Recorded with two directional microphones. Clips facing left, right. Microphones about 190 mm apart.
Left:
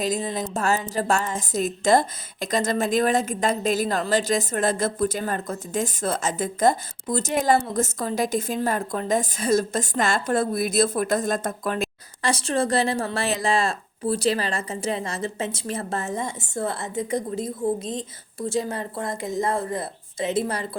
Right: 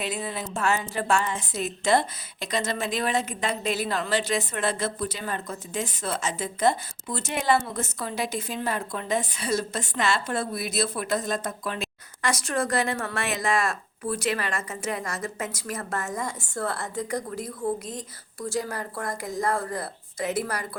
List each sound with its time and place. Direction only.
0.0 s a woman's voice: 40° left (ahead or behind)
12.2 s speech: 30° left (ahead or behind)